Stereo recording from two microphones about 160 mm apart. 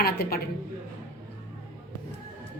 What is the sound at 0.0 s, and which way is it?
Speech, 75° left (ahead or behind).